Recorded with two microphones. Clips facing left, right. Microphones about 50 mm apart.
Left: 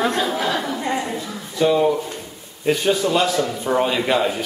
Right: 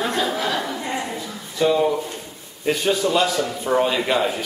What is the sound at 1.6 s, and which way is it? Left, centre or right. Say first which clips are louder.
A man's voice: left 2 dB; centre.